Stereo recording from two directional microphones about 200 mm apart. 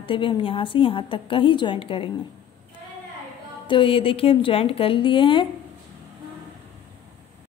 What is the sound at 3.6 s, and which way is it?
A woman's voice, 25° left (ahead or behind).